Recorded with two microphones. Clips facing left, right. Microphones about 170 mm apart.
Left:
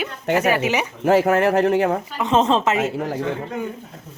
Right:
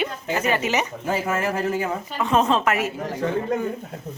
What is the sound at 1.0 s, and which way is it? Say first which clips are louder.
Speech: left 8 dB; 70° left (ahead or behind).